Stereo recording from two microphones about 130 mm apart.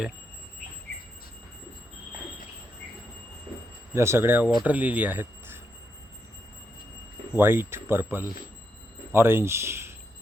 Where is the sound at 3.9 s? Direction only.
20° right (ahead or behind).